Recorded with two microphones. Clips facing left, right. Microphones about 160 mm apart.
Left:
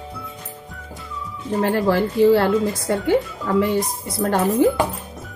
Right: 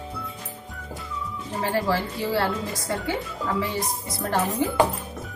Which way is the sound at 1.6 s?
55° left (ahead or behind).